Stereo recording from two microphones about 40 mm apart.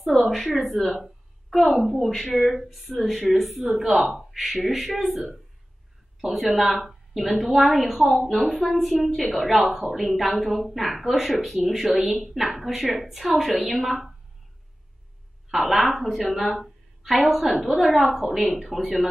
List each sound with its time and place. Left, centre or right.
0.6 s speech: centre
1.0 s a sound: centre
1.8 s speech: centre
12.1 s speech: centre
15.7 s a woman's voice: centre